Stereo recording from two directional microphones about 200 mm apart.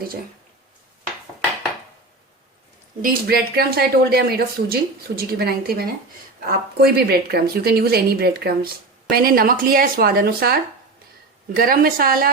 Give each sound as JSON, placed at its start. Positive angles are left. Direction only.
{"t": 3.0, "sound": "speech", "side_deg": -45}